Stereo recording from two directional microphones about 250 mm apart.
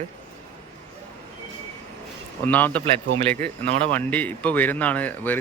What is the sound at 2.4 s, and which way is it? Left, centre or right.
Speech, centre.